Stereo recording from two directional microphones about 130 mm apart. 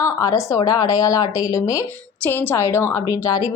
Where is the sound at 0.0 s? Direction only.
25° left (ahead or behind).